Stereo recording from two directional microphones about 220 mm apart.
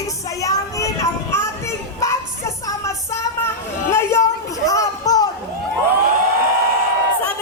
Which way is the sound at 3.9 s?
10° left (ahead or behind).